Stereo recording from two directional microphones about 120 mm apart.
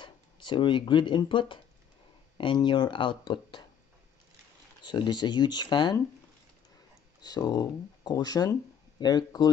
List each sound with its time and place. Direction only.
0.0 s speech: 40° left (ahead or behind)
4.8 s speech: 40° left (ahead or behind)
7.2 s speech: 35° left (ahead or behind)